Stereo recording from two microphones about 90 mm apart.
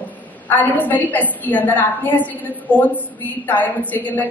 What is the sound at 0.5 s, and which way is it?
A woman's voice, 20° left (ahead or behind).